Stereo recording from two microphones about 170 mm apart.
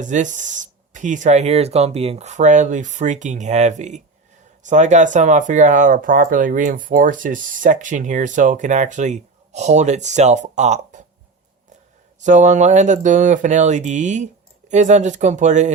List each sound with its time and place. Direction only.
0.0 s speech: 45° right (ahead or behind)
12.2 s speech: 45° right (ahead or behind)